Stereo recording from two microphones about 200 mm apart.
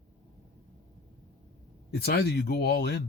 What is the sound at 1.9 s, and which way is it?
Speech, 55° left (ahead or behind).